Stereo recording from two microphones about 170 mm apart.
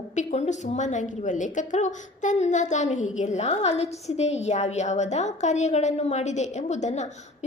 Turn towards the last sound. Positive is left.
turn(degrees=45)  # may be behind; listen again after turning